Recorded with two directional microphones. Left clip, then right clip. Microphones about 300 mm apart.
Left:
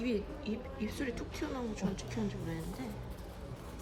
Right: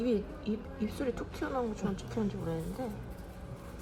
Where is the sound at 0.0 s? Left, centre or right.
Centre.